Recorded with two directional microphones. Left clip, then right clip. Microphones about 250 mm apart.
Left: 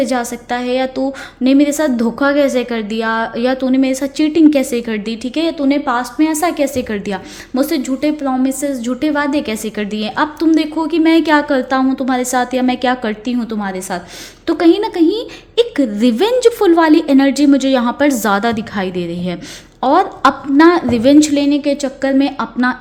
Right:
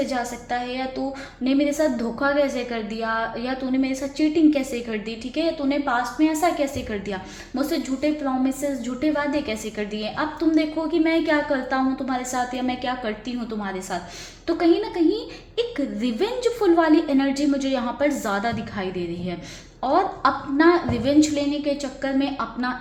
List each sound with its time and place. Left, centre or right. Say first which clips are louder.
0.0 s a woman's voice: left 9 dB; left